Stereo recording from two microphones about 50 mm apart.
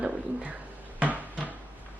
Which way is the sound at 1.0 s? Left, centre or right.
Right.